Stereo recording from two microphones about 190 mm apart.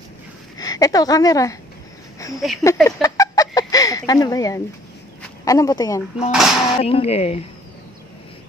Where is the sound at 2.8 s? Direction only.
15° left (ahead or behind).